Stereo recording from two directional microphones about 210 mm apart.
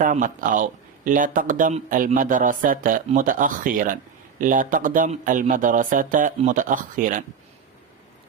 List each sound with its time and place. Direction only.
0.0 s speech: 40° right (ahead or behind)